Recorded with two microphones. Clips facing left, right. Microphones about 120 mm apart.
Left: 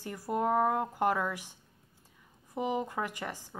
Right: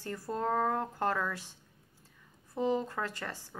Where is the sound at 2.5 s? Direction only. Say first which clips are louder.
Right 1 dB; 15° left (ahead or behind).